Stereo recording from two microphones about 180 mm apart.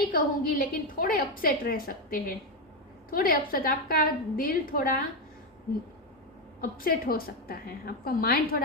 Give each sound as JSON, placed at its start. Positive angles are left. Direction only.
{"t": 0.1, "sound": "a woman's voice", "side_deg": 50}
{"t": 6.6, "sound": "a woman's voice", "side_deg": 55}